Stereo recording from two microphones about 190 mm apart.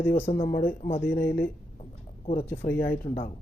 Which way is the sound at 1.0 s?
10° left (ahead or behind).